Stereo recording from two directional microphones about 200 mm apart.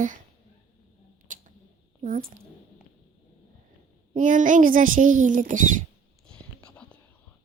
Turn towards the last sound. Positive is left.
turn(degrees=5)  # may be behind; listen again after turning